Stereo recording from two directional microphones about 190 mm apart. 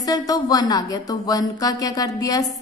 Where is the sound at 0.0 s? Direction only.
20° left (ahead or behind).